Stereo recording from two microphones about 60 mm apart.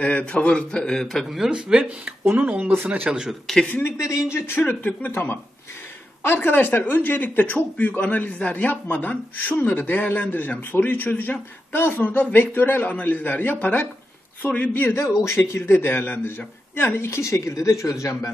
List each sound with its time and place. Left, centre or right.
0.0 s a man's voice: centre
1.4 s speech: centre
2.6 s speech: right
3.1 s speech: centre
3.8 s a man's voice: left
4.5 s a man's voice: left